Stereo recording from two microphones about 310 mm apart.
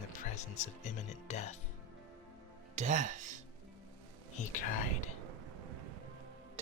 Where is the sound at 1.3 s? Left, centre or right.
Left.